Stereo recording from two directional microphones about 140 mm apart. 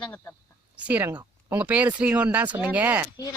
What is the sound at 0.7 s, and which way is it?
Speech, 10° right (ahead or behind).